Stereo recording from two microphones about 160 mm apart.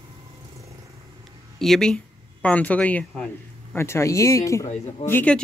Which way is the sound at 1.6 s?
5° left (ahead or behind).